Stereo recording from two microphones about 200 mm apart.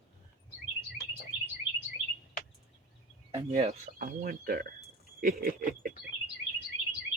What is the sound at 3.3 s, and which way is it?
Speech, 30° right (ahead or behind).